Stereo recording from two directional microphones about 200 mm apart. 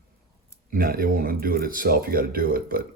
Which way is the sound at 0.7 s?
45° right (ahead or behind).